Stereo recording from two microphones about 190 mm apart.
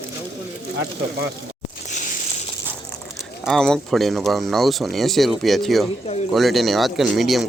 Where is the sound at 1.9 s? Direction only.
40° left (ahead or behind).